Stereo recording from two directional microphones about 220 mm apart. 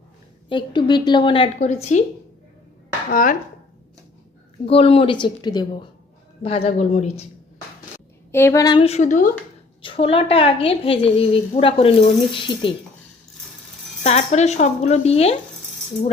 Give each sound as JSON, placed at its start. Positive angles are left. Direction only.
{"t": 0.4, "sound": "a woman's voice", "side_deg": 20}
{"t": 3.1, "sound": "speech", "side_deg": 40}
{"t": 4.6, "sound": "a woman's voice", "side_deg": 25}
{"t": 8.3, "sound": "a woman's voice", "side_deg": 10}
{"t": 9.8, "sound": "a woman's voice", "side_deg": 25}
{"t": 14.0, "sound": "speech", "side_deg": 30}